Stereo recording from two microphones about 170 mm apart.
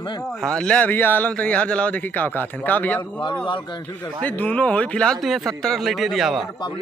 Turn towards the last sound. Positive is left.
turn(degrees=0)  # may be behind; listen again after turning